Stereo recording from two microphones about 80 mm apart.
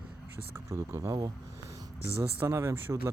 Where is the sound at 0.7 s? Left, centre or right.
Right.